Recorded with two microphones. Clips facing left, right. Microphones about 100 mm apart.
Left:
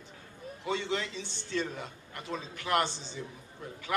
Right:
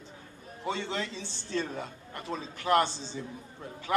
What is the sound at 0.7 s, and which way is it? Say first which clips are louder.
A man's voice: even; 30° right (ahead or behind).